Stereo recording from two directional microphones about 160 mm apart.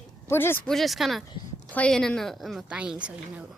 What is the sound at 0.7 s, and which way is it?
A woman's voice, centre (ahead or behind).